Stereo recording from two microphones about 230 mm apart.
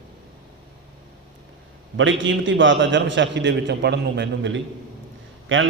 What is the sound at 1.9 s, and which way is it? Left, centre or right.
A man's voice, right.